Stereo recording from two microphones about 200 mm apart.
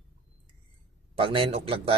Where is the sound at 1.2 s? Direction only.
25° right (ahead or behind).